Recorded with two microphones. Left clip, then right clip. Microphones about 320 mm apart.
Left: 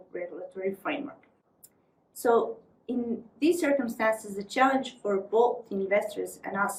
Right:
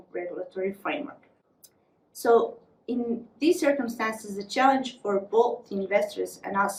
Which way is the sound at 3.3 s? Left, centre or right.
Centre.